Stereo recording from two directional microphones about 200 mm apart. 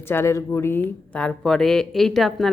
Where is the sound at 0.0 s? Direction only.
10° left (ahead or behind).